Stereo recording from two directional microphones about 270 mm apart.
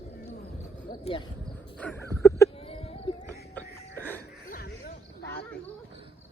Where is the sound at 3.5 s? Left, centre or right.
Centre.